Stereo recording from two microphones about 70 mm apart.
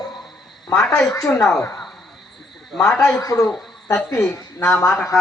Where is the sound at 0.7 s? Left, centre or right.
Left.